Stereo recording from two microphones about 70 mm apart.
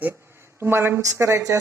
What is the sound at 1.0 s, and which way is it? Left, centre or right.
Speech, right.